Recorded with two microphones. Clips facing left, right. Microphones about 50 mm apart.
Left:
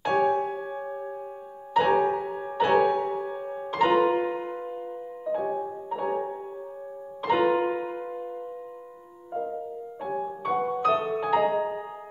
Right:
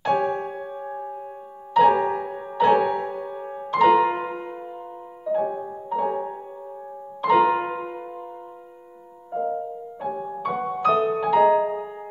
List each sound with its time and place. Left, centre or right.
0.0 s music: centre
2.4 s music: centre
9.3 s music: centre